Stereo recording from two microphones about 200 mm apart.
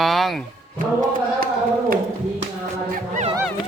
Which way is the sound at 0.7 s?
45° right (ahead or behind).